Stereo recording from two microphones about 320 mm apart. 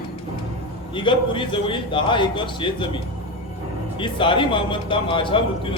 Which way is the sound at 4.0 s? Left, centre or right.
Centre.